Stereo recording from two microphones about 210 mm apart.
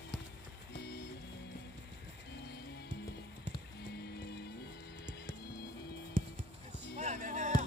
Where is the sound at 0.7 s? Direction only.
50° left (ahead or behind).